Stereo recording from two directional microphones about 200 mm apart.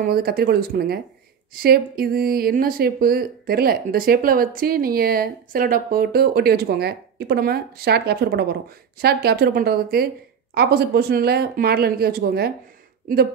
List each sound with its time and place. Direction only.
0.0 s speech: 50° right (ahead or behind)